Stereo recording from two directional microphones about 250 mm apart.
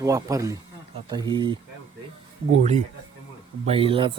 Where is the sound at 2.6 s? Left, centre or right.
Right.